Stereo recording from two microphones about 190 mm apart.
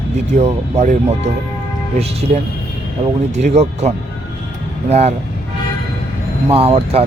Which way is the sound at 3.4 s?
35° right (ahead or behind).